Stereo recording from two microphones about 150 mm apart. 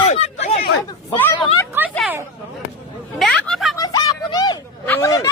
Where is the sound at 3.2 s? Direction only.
5° left (ahead or behind).